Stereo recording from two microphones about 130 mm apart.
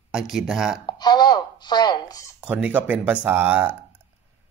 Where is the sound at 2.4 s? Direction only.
10° right (ahead or behind).